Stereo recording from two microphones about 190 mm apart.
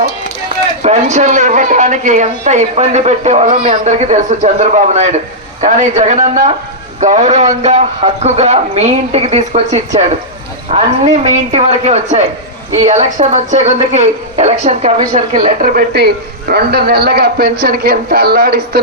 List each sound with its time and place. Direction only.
0.8 s a woman's voice: 35° right (ahead or behind); by 18.8 s 55° right (ahead or behind)